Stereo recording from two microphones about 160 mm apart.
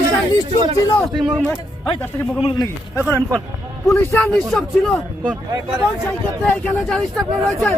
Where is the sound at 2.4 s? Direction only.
30° left (ahead or behind).